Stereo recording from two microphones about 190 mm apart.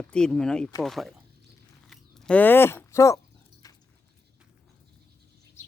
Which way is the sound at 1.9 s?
5° left (ahead or behind).